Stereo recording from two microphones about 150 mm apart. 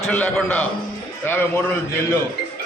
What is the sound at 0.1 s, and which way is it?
A man's voice, 10° left (ahead or behind).